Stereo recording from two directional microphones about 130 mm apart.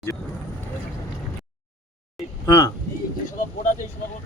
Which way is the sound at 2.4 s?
25° left (ahead or behind).